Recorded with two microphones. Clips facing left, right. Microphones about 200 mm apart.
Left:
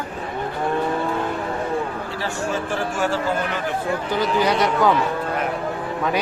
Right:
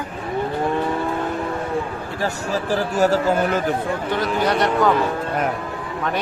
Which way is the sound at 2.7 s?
40° right (ahead or behind).